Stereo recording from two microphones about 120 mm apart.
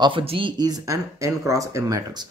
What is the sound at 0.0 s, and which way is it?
Speech, 45° right (ahead or behind).